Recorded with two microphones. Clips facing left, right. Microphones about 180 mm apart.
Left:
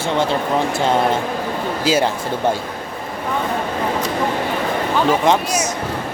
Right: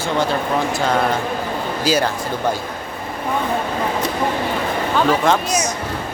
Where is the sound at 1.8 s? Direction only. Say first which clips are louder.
Left 1 dB; 25° left (ahead or behind).